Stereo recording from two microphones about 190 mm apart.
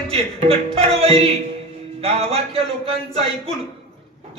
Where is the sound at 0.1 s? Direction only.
30° right (ahead or behind).